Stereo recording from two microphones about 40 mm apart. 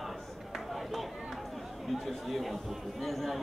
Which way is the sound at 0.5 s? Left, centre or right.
Centre.